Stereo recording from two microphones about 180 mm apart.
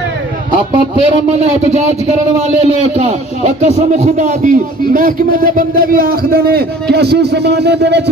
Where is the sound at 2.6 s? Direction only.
35° right (ahead or behind).